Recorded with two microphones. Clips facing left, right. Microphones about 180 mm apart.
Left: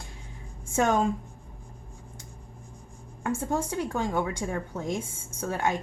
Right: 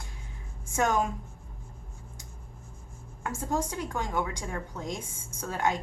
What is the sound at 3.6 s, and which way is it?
A woman's voice, 25° left (ahead or behind).